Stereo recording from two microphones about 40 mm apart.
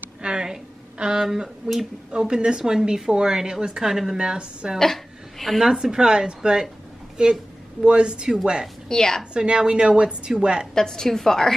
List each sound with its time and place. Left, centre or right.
0.2 s a sound: right
2.1 s a woman's voice: right
4.2 s a woman's voice: right
4.7 s a woman's voice: centre
5.7 s a woman's voice: centre
8.8 s a woman's voice: centre
9.3 s a woman's voice: right
10.7 s a woman's voice: centre